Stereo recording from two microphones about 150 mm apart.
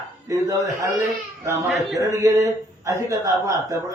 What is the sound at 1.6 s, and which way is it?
Speech, centre (ahead or behind).